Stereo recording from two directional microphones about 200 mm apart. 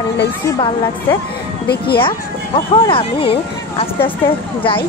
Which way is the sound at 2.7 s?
25° left (ahead or behind).